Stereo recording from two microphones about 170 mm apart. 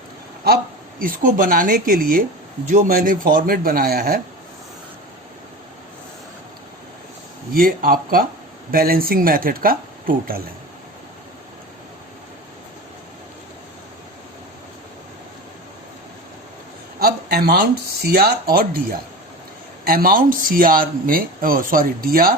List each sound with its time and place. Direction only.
0.4 s speech: 60° right (ahead or behind)
7.5 s speech: 60° right (ahead or behind)
17.0 s speech: 65° right (ahead or behind)